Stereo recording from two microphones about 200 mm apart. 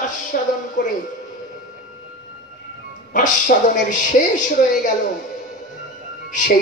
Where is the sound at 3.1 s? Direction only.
40° left (ahead or behind).